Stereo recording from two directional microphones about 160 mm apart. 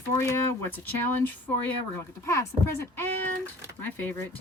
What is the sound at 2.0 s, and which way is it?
Speech, 15° left (ahead or behind).